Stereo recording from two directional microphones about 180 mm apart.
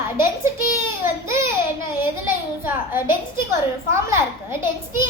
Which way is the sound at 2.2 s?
10° right (ahead or behind).